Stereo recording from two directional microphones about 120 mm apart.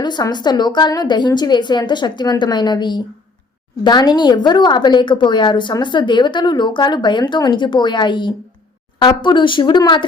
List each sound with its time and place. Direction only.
0.0 s a woman's voice: 35° left (ahead or behind)